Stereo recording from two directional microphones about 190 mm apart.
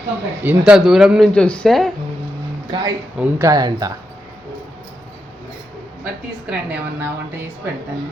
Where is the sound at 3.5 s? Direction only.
20° right (ahead or behind).